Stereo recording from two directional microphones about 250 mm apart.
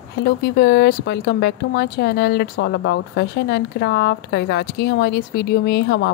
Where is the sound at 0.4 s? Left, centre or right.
Left.